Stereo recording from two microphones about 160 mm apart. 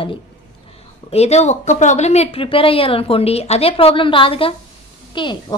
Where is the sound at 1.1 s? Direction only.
40° left (ahead or behind).